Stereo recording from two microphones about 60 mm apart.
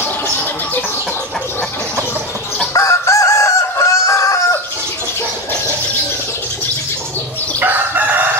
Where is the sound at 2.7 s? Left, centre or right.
Left.